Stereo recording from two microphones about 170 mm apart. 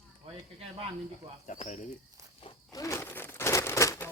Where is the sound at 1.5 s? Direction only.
45° left (ahead or behind).